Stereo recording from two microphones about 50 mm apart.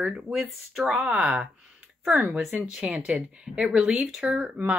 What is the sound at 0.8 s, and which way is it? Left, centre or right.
Speech, centre.